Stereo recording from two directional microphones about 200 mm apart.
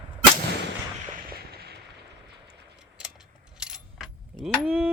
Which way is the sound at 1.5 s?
55° right (ahead or behind).